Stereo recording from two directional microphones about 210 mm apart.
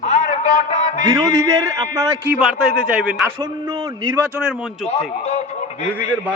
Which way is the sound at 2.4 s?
5° right (ahead or behind).